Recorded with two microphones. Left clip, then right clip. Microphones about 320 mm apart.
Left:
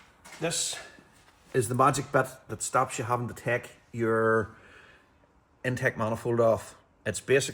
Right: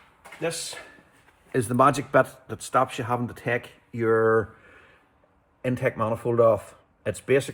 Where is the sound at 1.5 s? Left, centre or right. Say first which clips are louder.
Right 4 dB; centre.